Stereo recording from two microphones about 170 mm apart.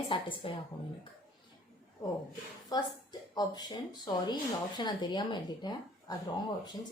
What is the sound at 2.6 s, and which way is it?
Speech, 25° left (ahead or behind).